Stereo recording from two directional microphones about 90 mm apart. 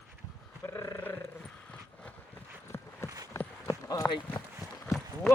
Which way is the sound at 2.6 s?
30° left (ahead or behind).